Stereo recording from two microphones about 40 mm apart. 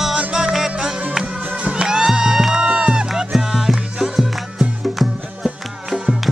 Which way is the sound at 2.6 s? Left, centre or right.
Right.